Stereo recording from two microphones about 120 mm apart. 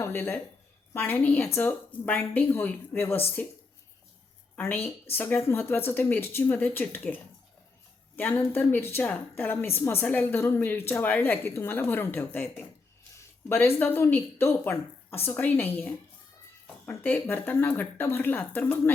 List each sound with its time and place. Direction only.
0.0 s a woman's voice: 20° left (ahead or behind)